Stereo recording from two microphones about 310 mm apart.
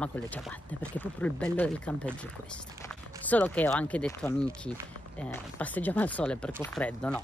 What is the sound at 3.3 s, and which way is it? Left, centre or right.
Speech, centre.